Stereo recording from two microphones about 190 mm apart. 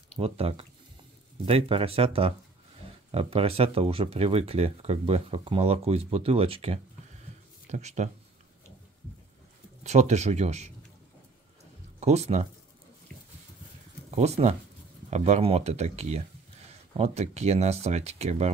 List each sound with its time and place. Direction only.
0.2 s speech: 30° right (ahead or behind)
9.8 s speech: 35° right (ahead or behind)
12.0 s speech: 35° right (ahead or behind)
13.1 s dog: 5° left (ahead or behind)
14.1 s speech: 35° right (ahead or behind)